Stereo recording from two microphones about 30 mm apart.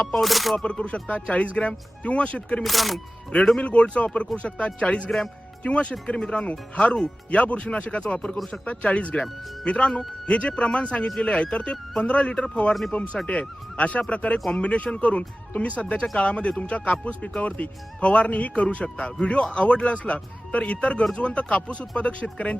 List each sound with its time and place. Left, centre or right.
0.1 s speech: centre
0.6 s speech: left
1.0 s speech: left
2.6 s speech: centre
3.6 s speech: left
8.6 s speech: left